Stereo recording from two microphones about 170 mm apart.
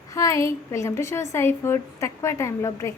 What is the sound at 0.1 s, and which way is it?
A woman's voice, 20° left (ahead or behind).